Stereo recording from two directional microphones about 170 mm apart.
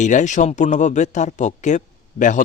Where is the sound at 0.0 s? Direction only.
45° left (ahead or behind).